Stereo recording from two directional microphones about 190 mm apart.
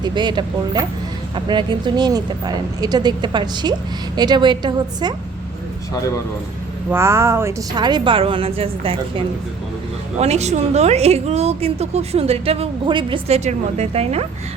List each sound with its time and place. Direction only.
0.0 s speech: 25° right (ahead or behind)
6.9 s a woman's voice: 15° right (ahead or behind); by 14.3 s 35° right (ahead or behind)